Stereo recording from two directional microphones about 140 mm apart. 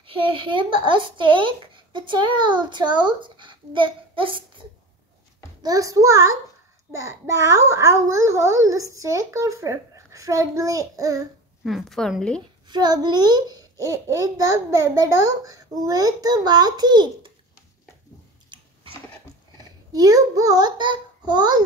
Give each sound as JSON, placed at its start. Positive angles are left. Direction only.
{"t": 0.0, "sound": "speech", "side_deg": -35}
{"t": 5.6, "sound": "a child's voice", "side_deg": -25}
{"t": 11.6, "sound": "a woman's voice", "side_deg": 0}
{"t": 12.6, "sound": "a child's voice", "side_deg": -30}
{"t": 19.9, "sound": "a child's voice", "side_deg": -25}